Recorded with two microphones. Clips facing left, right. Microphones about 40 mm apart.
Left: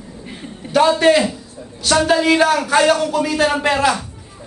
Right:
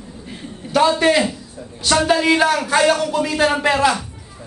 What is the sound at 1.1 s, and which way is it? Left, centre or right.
A man's voice, centre.